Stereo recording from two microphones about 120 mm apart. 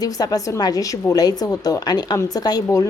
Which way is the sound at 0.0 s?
30° left (ahead or behind).